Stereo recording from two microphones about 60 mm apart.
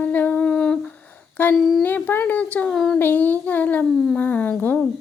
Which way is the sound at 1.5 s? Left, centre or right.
Centre.